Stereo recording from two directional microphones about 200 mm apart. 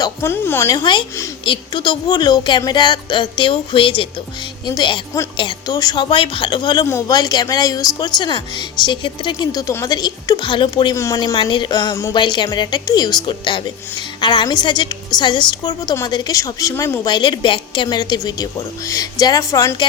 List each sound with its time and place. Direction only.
0.0 s a woman's voice: 10° left (ahead or behind)